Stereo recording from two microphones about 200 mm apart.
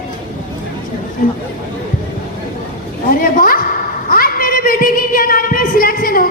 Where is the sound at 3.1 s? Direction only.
45° left (ahead or behind).